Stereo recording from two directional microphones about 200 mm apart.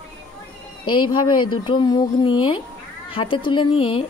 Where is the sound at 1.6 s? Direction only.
25° left (ahead or behind).